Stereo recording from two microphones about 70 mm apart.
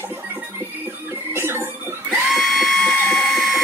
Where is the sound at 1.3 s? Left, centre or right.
Right.